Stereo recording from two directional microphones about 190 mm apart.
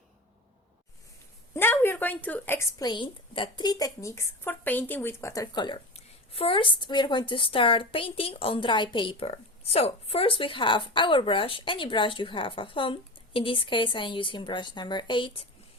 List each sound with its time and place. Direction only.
1.5 s a woman's voice: 10° left (ahead or behind)